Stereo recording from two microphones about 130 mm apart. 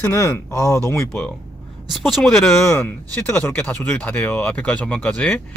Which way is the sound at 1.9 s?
Centre (ahead or behind).